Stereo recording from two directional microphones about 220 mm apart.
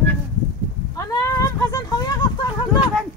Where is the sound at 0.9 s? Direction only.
15° left (ahead or behind).